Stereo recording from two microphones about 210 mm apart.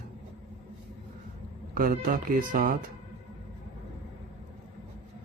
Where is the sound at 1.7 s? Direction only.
45° right (ahead or behind).